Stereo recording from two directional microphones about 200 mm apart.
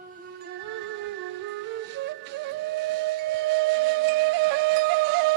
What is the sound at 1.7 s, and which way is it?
Flute, 60° right (ahead or behind).